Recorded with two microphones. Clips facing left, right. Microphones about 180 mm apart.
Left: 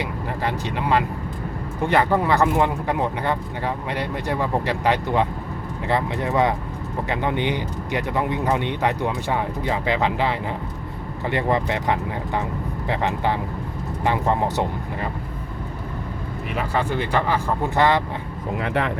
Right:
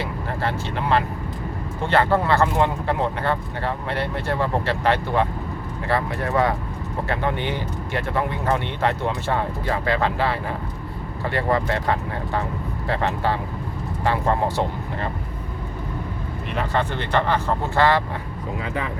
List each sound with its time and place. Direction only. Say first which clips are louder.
0.0 s speech: even; 15° left (ahead or behind)
16.6 s speech: left 1 dB; 10° left (ahead or behind)
18.6 s speech: left 6 dB; 70° left (ahead or behind)